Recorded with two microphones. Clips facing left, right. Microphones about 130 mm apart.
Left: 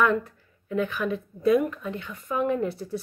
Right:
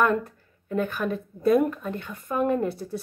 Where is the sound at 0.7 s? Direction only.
45° right (ahead or behind).